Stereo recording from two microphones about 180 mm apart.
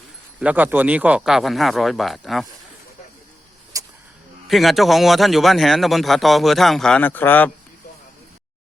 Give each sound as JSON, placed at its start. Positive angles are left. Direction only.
{"t": 0.3, "sound": "a man's voice", "side_deg": -10}
{"t": 3.7, "sound": "vehicle", "side_deg": -20}
{"t": 4.4, "sound": "a man's voice", "side_deg": 0}